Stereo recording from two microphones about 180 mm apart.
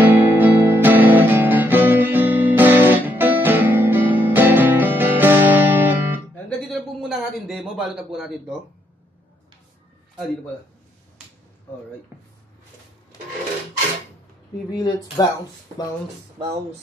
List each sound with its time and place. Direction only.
0.0 s guitar: 10° right (ahead or behind)
6.3 s a sound: centre (ahead or behind)
12.1 s speech: 10° right (ahead or behind)
14.7 s speech: 20° left (ahead or behind)